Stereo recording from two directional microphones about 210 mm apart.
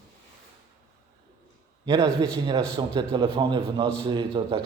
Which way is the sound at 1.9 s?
15° right (ahead or behind).